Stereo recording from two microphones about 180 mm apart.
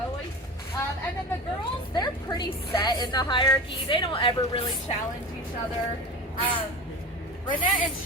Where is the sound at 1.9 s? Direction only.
20° left (ahead or behind).